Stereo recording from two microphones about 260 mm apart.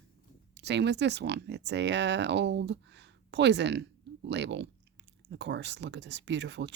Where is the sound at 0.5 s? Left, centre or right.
Right.